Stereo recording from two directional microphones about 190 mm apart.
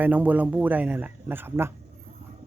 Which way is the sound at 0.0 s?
10° right (ahead or behind).